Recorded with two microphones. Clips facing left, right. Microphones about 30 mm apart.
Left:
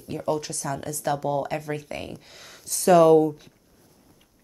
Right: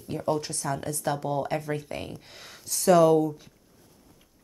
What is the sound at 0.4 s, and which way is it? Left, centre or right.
Speech, centre.